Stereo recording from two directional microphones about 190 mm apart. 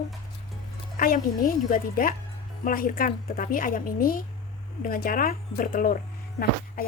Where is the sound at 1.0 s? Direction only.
50° left (ahead or behind).